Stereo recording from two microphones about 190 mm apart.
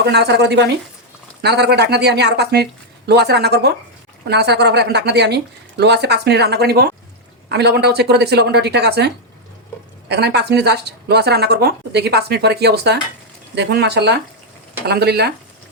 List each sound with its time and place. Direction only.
0.0 s a woman's voice: 60° right (ahead or behind)